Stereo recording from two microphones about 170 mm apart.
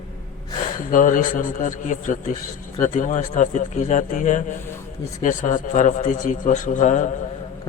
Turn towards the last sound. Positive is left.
turn(degrees=45)  # may be behind; listen again after turning